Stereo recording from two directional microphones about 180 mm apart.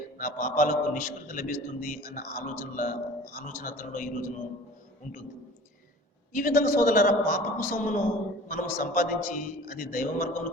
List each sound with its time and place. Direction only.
0.2 s a man's voice: 50° left (ahead or behind)
6.3 s a man's voice: 45° left (ahead or behind)